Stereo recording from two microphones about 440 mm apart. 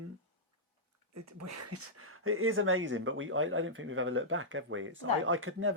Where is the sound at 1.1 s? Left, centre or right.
Right.